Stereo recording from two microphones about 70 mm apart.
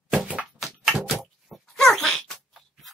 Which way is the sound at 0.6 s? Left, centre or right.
Centre.